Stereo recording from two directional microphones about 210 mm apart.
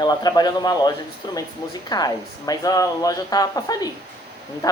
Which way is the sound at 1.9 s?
20° left (ahead or behind).